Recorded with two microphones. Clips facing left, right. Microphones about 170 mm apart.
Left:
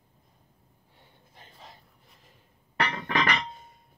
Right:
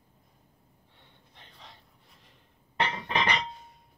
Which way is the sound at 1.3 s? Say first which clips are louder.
Left 3 dB; 45° left (ahead or behind).